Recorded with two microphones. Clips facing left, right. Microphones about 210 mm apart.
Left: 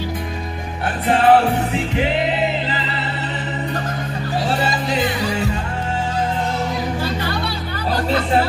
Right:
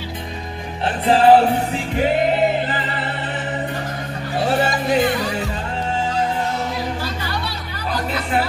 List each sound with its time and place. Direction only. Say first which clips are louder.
1.0 s music: right 2 dB; 30° right (ahead or behind)
2.0 s music: right 4 dB; 45° right (ahead or behind)